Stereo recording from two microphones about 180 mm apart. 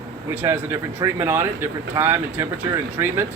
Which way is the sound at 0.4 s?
15° right (ahead or behind).